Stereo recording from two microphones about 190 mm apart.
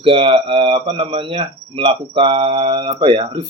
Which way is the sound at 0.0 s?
30° right (ahead or behind).